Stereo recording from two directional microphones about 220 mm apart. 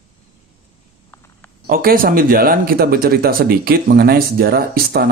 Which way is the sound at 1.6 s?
40° right (ahead or behind).